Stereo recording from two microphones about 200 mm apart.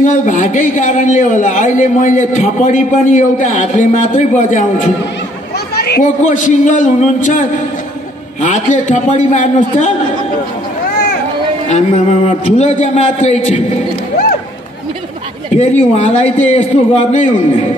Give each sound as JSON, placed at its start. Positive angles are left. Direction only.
{"t": 0.0, "sound": "a man's voice", "side_deg": 40}
{"t": 5.8, "sound": "a man's voice", "side_deg": 50}
{"t": 11.7, "sound": "a man's voice", "side_deg": 35}
{"t": 15.5, "sound": "a man's voice", "side_deg": 35}